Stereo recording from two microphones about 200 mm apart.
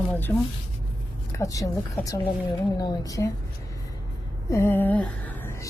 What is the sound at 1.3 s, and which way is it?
A woman's voice, 15° left (ahead or behind).